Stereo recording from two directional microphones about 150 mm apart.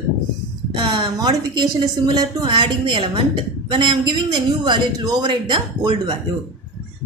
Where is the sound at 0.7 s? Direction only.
30° right (ahead or behind).